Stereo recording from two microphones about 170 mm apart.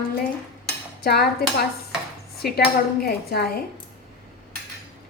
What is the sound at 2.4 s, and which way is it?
A woman's voice, 65° left (ahead or behind).